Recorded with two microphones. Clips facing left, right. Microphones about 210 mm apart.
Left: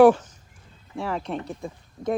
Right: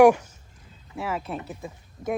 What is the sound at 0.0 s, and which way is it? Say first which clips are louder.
Speech: left 1 dB; 10° right (ahead or behind).